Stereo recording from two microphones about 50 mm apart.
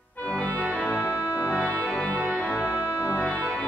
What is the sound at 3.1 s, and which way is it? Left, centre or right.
Organ, left.